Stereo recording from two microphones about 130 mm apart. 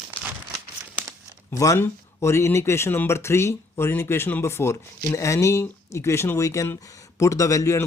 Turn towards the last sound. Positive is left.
turn(degrees=25)  # may be behind; listen again after turning